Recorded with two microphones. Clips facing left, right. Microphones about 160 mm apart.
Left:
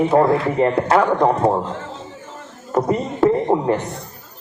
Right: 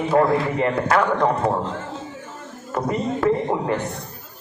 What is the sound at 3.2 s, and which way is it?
Speech, 25° left (ahead or behind).